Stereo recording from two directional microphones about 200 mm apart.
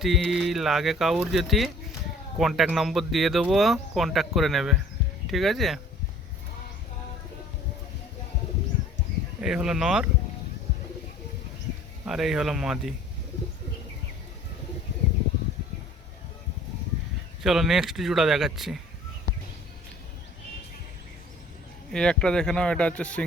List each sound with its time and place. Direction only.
0.0 s speech: centre (ahead or behind)
9.4 s speech: 5° right (ahead or behind)
12.0 s speech: centre (ahead or behind)
17.4 s speech: centre (ahead or behind)
21.8 s speech: 5° left (ahead or behind)